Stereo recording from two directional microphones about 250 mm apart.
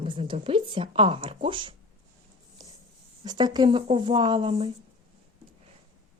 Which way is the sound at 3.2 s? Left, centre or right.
Centre.